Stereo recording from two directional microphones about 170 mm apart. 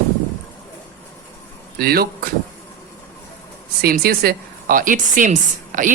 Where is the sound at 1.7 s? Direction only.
65° right (ahead or behind).